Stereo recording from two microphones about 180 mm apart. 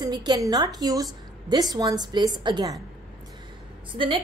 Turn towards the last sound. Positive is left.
turn(degrees=-30)  # may be behind; listen again after turning